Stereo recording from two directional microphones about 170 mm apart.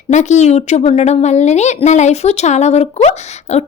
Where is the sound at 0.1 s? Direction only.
45° left (ahead or behind).